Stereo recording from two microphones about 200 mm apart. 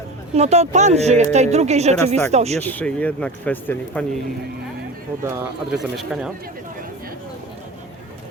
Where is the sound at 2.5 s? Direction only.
10° left (ahead or behind).